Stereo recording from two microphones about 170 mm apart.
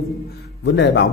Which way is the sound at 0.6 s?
85° left.